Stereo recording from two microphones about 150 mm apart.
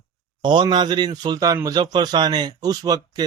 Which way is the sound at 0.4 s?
30° right (ahead or behind).